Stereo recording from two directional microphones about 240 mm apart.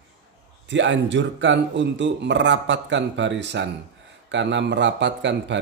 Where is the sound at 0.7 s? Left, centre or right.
Right.